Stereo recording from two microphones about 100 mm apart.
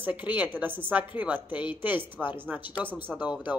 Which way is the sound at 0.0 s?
15° right (ahead or behind).